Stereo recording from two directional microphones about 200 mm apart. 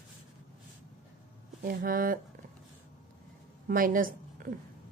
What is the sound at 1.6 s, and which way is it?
Speech, 45° right (ahead or behind).